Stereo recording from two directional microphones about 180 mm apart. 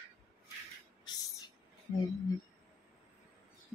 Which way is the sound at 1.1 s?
25° left (ahead or behind).